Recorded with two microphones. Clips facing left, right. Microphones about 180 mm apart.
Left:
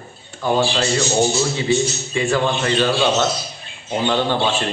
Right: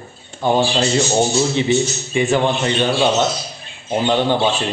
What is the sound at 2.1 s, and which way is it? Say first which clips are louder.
A man's voice: right 3 dB; 20° right (ahead or behind).